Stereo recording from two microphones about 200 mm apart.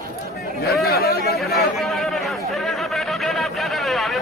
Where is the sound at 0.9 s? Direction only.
50° left (ahead or behind).